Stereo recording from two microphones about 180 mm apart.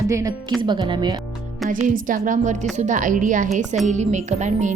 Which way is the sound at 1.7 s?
45° right (ahead or behind).